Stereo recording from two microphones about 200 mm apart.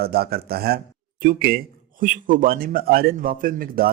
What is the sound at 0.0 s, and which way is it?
Speech, 50° right (ahead or behind).